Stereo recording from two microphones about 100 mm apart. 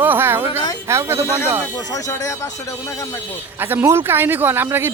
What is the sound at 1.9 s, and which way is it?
Speech, 35° left (ahead or behind).